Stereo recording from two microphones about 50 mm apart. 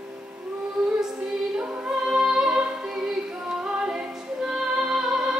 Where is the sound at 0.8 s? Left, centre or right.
Centre.